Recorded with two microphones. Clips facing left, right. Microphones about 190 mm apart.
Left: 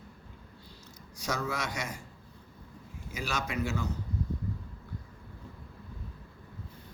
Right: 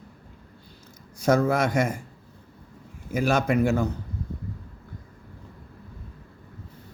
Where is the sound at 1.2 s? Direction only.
55° right (ahead or behind).